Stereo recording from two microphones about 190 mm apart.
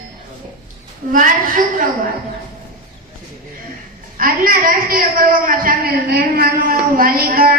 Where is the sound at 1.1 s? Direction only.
45° right (ahead or behind).